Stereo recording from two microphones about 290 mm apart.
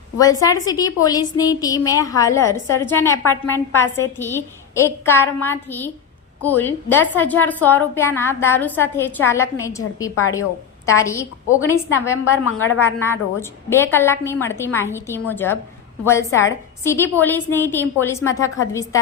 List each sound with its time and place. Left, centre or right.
0.2 s a woman's voice: centre
12.5 s a woman's voice: left
12.8 s a woman's voice: centre